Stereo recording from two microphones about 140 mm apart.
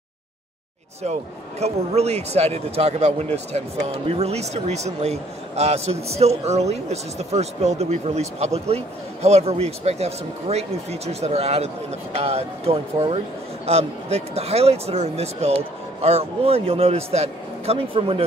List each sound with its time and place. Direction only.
1.6 s a man's voice: 50° right (ahead or behind)